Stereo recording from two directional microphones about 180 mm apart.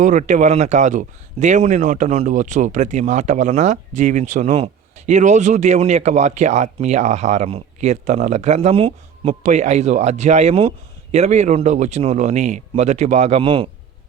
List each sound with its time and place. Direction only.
0.0 s speech: 45° right (ahead or behind)